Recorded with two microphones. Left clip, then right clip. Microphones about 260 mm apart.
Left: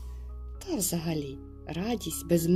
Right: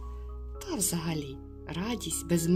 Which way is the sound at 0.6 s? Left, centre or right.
Centre.